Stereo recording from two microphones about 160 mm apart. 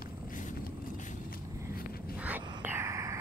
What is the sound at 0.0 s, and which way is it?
Vehicle, 55° left (ahead or behind).